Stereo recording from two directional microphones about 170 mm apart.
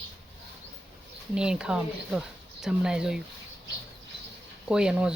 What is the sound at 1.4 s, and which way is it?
Speech, 5° right (ahead or behind).